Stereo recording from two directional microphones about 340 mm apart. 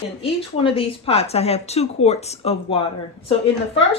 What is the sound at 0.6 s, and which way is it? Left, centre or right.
Speech, centre.